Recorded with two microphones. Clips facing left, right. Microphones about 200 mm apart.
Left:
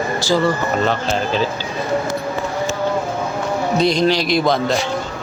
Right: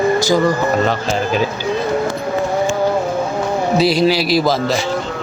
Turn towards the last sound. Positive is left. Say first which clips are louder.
# right 2 dB
turn(degrees=-5)  # may be behind; listen again after turning